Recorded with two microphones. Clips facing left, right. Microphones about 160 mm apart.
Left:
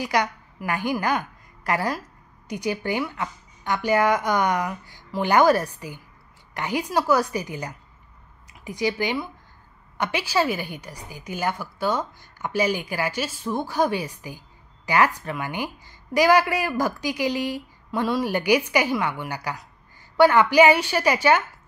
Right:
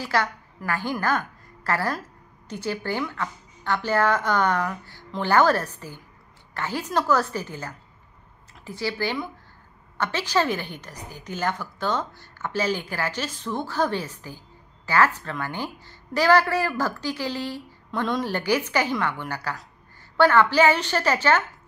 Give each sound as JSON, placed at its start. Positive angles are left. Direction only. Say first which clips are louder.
{"t": 0.0, "sound": "a woman's voice", "louder": "left 1 dB", "side_deg": 15}